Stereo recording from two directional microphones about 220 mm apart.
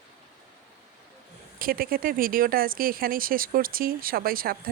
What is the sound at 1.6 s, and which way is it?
Speech, 40° right (ahead or behind).